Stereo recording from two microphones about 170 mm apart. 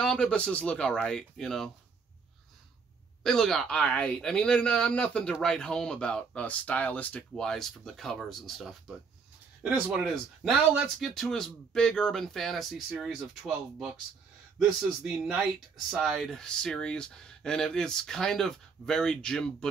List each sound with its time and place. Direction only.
0.0 s speech: 5° left (ahead or behind)
3.3 s speech: 5° left (ahead or behind)